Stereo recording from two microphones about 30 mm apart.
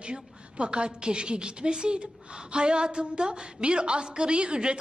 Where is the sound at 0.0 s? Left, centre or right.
Right.